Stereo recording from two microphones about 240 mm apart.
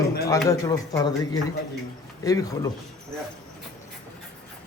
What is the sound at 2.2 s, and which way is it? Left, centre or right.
Speech, centre.